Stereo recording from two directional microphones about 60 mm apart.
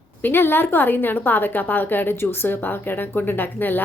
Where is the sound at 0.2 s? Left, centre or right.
Left.